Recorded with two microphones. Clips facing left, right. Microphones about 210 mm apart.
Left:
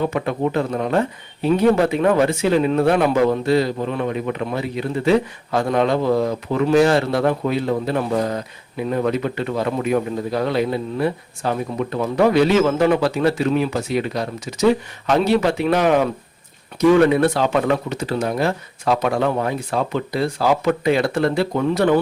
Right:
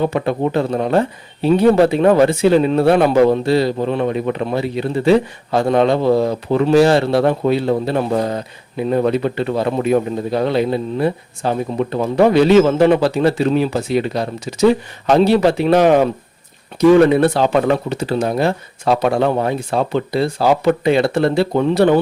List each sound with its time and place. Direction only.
0.1 s speech: 30° right (ahead or behind)
17.1 s speech: 30° right (ahead or behind)